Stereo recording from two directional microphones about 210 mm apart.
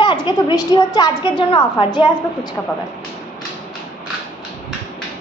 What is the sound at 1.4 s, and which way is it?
A woman's voice, 25° left (ahead or behind).